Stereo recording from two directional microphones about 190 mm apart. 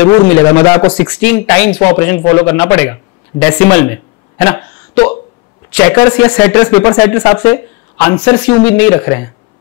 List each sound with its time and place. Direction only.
0.0 s a man's voice: 15° left (ahead or behind)
5.7 s a man's voice: 10° left (ahead or behind)